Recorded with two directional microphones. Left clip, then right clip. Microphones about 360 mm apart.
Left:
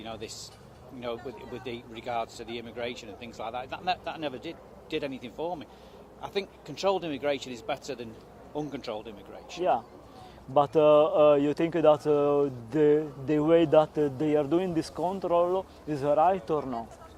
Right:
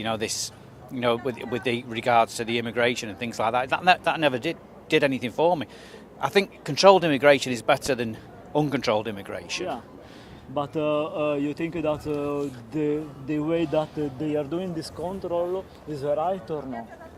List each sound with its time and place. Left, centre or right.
0.0 s speech: centre
10.8 s speech: left